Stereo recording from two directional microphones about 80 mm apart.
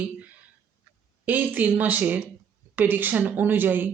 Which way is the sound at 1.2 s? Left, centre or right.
Right.